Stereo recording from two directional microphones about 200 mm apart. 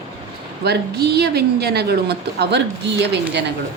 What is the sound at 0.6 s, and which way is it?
A woman's voice, 55° right (ahead or behind).